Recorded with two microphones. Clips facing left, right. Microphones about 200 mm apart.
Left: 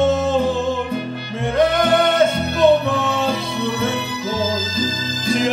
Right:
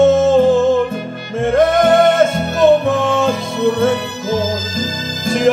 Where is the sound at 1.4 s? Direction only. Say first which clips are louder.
Right 5 dB; 50° right (ahead or behind).